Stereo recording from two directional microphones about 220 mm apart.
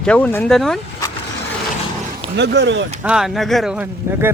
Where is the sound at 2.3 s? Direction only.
50° right (ahead or behind).